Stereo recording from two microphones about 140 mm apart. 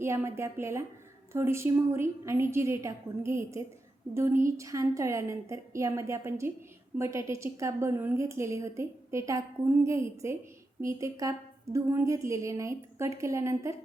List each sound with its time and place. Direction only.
0.0 s a woman's voice: 20° right (ahead or behind)